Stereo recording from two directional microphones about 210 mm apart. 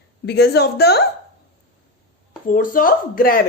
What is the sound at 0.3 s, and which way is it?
Speech, 50° left (ahead or behind).